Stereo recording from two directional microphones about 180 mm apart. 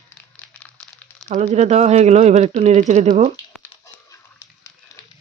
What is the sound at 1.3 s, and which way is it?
Speech, 40° right (ahead or behind).